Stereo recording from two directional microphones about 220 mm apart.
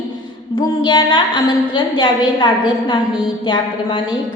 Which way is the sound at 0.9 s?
20° left (ahead or behind).